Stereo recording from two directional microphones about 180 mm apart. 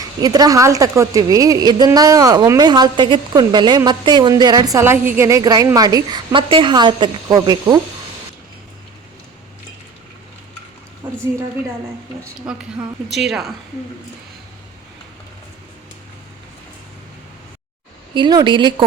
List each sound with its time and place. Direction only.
0.0 s a woman's voice: 20° right (ahead or behind)
11.0 s a sound: 25° right (ahead or behind)
12.5 s a woman's voice: 5° right (ahead or behind)
18.1 s a woman's voice: 25° right (ahead or behind)